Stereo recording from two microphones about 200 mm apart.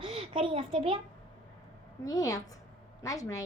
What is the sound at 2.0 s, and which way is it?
A woman's voice, 15° left (ahead or behind).